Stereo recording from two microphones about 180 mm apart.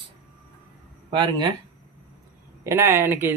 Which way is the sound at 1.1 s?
25° right (ahead or behind).